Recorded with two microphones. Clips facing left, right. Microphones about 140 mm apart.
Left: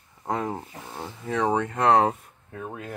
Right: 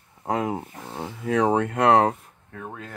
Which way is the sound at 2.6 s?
10° left (ahead or behind).